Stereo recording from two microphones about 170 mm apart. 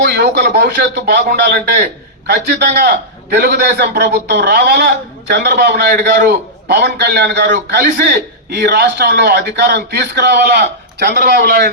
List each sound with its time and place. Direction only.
0.0 s a man's voice: 75° right (ahead or behind)
8.0 s a man's voice: 70° right (ahead or behind); by 11.7 s 90° right